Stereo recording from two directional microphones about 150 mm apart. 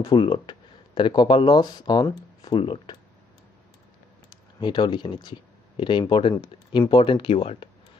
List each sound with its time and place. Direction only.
0.0 s speech: 30° left (ahead or behind)
4.3 s speech: 30° left (ahead or behind)